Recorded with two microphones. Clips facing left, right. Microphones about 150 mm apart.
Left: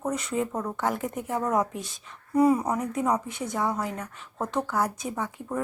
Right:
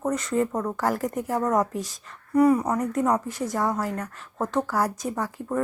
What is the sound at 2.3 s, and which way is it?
Speech, 15° left (ahead or behind).